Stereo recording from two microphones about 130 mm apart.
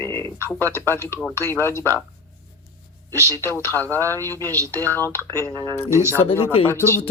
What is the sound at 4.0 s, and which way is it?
Speech, 25° right (ahead or behind).